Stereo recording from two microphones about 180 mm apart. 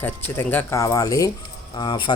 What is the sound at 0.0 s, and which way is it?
Speech, 10° left (ahead or behind).